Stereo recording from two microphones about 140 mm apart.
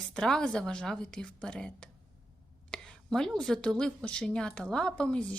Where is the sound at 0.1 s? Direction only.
5° left (ahead or behind).